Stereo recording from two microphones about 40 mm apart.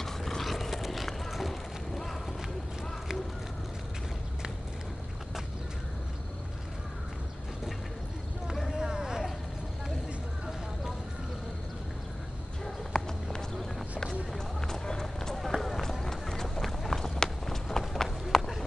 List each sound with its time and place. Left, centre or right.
0.0 s vehicle: centre
8.6 s vehicle: centre
12.6 s a sound: centre
14.3 s run: centre
17.0 s run: centre